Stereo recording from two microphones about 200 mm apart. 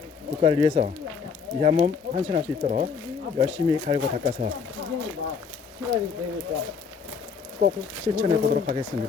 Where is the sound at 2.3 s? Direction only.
35° right (ahead or behind).